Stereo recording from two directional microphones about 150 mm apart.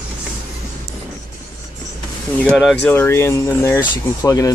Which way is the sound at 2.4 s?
5° left (ahead or behind).